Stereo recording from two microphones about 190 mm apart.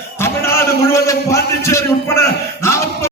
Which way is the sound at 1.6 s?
15° left (ahead or behind).